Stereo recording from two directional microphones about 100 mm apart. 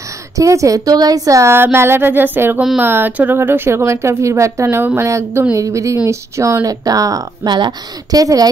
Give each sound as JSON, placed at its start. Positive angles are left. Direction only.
{"t": 0.4, "sound": "speech", "side_deg": -35}